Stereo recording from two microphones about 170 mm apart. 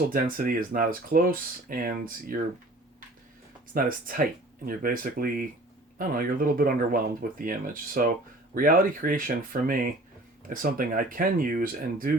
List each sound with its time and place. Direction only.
0.1 s speech: 55° right (ahead or behind)
3.8 s speech: 55° right (ahead or behind)